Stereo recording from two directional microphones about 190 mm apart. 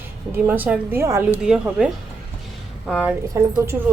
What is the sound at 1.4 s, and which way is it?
A woman's voice, 5° right (ahead or behind).